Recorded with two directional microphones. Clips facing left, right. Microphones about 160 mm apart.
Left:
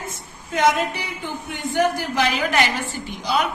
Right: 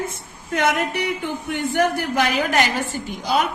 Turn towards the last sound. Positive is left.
turn(degrees=-45)  # may be behind; listen again after turning